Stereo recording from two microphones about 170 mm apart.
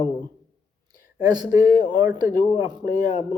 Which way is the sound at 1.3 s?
20° right (ahead or behind).